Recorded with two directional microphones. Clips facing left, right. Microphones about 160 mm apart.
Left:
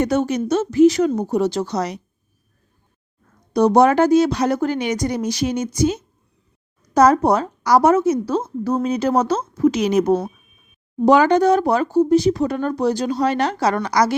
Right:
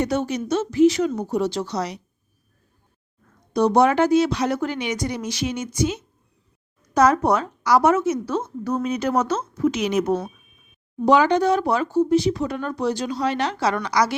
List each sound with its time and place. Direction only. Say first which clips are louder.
0.0 s speech: left 4 dB; 50° left (ahead or behind)
3.5 s a woman's voice: left 3 dB; 40° left (ahead or behind)
11.0 s speech: left 3 dB; 45° left (ahead or behind)